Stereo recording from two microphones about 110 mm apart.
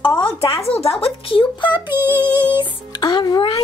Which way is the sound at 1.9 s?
20° right (ahead or behind).